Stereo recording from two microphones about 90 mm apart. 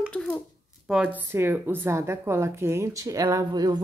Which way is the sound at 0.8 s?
5° right (ahead or behind).